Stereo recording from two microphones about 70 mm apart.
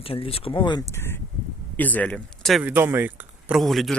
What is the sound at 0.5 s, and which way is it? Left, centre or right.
Speech, left.